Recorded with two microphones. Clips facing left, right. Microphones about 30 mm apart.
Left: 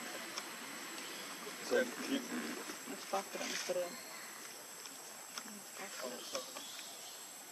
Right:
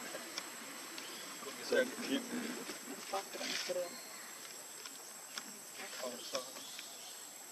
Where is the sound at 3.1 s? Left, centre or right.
Right.